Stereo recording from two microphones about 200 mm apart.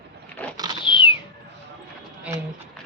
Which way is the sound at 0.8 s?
25° left (ahead or behind).